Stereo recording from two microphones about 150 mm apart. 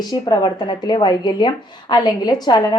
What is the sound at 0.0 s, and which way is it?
A woman's voice, 30° left (ahead or behind).